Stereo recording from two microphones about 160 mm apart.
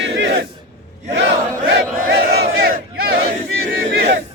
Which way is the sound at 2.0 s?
70° right (ahead or behind).